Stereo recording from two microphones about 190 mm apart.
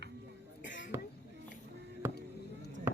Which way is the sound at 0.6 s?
70° left (ahead or behind).